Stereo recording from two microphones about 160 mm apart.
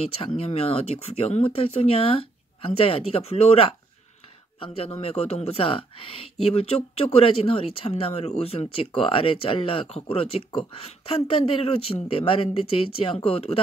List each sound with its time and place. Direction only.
0.2 s speech: 35° left (ahead or behind)